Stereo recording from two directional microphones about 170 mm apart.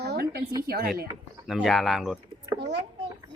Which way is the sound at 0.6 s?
65° right (ahead or behind).